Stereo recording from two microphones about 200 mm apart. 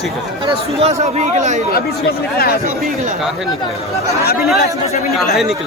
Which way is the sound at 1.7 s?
50° left (ahead or behind).